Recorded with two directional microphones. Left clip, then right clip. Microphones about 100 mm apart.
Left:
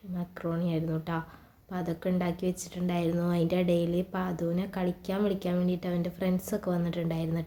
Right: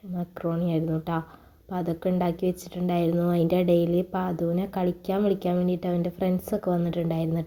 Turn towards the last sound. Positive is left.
turn(degrees=-35)  # may be behind; listen again after turning